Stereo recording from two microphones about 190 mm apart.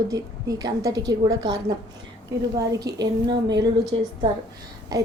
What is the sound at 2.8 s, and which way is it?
Speech, 20° right (ahead or behind).